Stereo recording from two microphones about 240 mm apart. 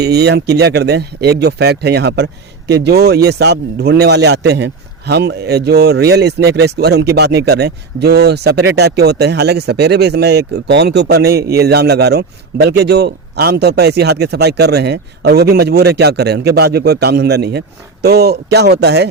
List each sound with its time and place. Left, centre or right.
0.0 s speech: right